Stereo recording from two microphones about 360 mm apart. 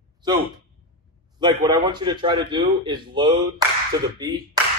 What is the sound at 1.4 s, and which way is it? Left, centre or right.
A man's voice, centre.